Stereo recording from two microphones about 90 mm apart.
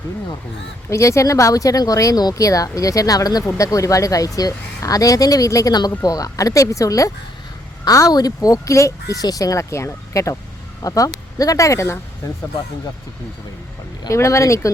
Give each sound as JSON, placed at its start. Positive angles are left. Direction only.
{"t": 0.9, "sound": "speech", "side_deg": 35}
{"t": 14.1, "sound": "speech", "side_deg": 35}